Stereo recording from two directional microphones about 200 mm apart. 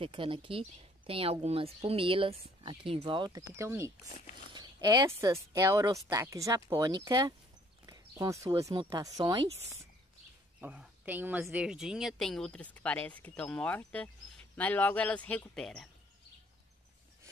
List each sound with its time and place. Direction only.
0.0 s speech: 25° right (ahead or behind)
10.6 s a woman's voice: 5° right (ahead or behind)